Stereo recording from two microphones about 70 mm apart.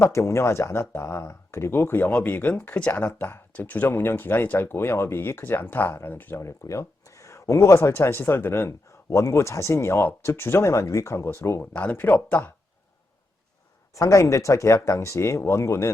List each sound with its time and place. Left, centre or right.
0.0 s speech: left; by 3.1 s centre
3.2 s speech: left
6.4 s speech: left
11.7 s speech: left
13.9 s speech: left